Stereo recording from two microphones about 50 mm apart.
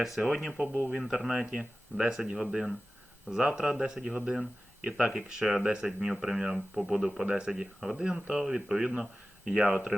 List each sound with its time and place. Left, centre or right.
0.0 s speech: centre